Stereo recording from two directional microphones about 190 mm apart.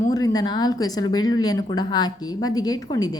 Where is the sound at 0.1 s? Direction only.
20° left (ahead or behind).